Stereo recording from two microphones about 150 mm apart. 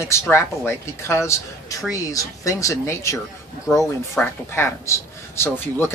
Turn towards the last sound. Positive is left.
turn(degrees=15)  # may be behind; listen again after turning